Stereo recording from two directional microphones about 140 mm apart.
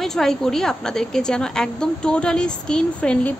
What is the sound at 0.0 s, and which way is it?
A woman's voice, 5° left (ahead or behind).